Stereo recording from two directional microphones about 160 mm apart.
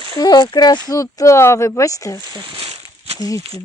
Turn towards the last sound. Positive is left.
turn(degrees=20)  # may be behind; listen again after turning